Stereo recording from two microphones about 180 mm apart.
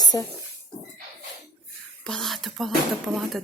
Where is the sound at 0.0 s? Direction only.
20° left (ahead or behind).